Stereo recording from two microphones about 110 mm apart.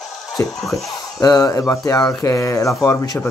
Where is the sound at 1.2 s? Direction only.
35° left (ahead or behind).